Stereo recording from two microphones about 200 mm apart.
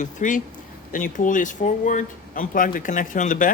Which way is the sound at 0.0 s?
40° left (ahead or behind).